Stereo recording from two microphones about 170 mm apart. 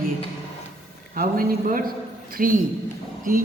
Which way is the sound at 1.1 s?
55° right (ahead or behind).